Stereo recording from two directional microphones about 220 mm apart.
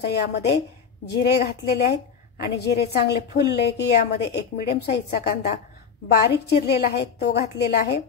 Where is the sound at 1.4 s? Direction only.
50° left (ahead or behind).